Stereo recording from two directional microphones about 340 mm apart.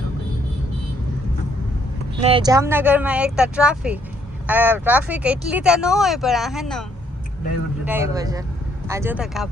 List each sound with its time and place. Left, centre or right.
2.2 s speech: centre
7.9 s speech: centre